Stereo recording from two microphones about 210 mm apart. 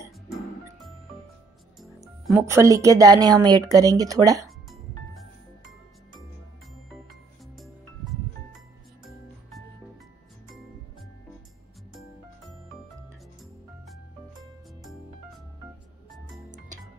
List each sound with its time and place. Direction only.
1.8 s music: centre (ahead or behind)
2.3 s speech: 15° right (ahead or behind)
4.6 s music: centre (ahead or behind)
7.5 s music: centre (ahead or behind)